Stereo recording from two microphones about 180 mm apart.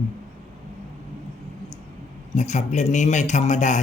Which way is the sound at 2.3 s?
40° left (ahead or behind).